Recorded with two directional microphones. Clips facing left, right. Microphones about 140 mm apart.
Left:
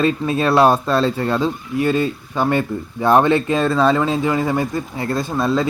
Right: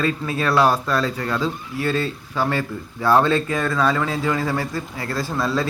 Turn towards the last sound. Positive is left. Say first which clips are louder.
# left 4 dB
turn(degrees=20)  # may be behind; listen again after turning